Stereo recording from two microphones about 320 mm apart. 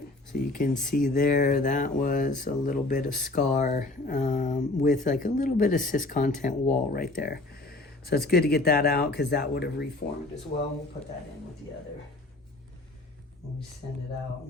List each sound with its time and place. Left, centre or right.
0.3 s speech: left